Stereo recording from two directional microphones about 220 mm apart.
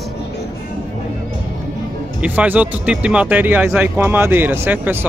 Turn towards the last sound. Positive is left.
turn(degrees=-10)  # may be behind; listen again after turning